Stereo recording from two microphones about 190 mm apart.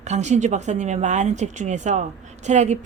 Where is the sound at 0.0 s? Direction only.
35° right (ahead or behind).